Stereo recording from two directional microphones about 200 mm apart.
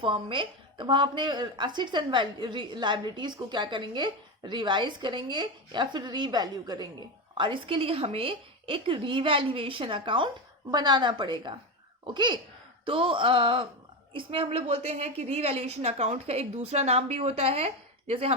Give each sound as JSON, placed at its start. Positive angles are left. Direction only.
{"t": 0.0, "sound": "a woman's voice", "side_deg": -25}